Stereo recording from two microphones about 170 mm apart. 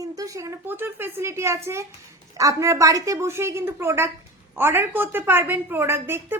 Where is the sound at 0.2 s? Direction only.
20° right (ahead or behind).